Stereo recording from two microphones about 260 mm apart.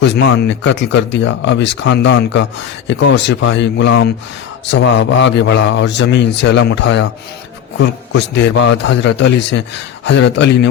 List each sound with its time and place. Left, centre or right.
0.0 s speech: left